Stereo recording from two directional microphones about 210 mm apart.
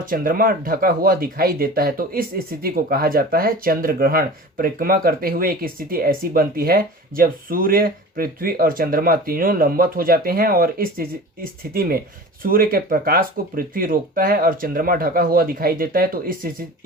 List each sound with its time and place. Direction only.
0.0 s speech: 40° right (ahead or behind)